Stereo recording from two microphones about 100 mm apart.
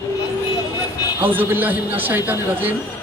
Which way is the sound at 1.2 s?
20° right (ahead or behind).